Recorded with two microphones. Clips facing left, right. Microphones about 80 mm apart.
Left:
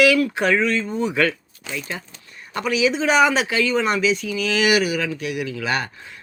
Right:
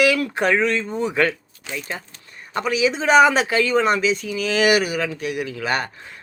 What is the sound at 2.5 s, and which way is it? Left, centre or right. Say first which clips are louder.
Speech: even; right.